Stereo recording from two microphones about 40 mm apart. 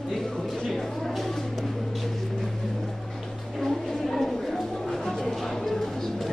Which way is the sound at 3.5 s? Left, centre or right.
Centre.